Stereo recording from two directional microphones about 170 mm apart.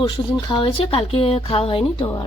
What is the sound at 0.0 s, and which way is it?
Speech, 30° left (ahead or behind).